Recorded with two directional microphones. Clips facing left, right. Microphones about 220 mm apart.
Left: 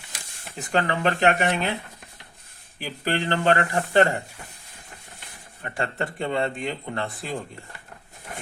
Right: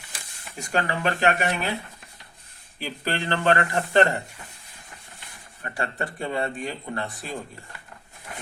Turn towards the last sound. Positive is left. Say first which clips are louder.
# left 1 dB
turn(degrees=25)  # may be behind; listen again after turning